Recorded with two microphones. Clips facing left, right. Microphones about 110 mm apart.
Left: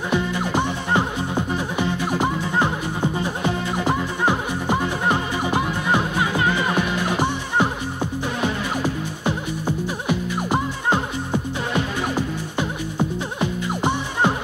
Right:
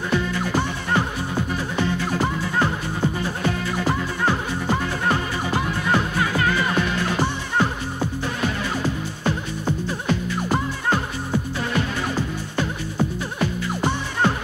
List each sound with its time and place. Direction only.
0.1 s music: 20° left (ahead or behind)